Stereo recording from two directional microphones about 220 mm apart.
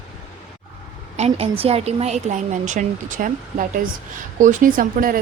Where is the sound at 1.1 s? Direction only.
30° right (ahead or behind).